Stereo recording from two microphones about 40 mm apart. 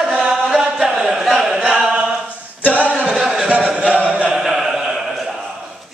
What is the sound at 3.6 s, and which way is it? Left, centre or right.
Chant, right.